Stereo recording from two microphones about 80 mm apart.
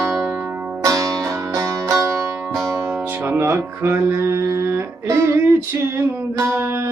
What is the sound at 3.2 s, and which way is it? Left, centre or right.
Music, right.